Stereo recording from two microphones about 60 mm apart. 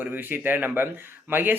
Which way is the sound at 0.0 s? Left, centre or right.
Right.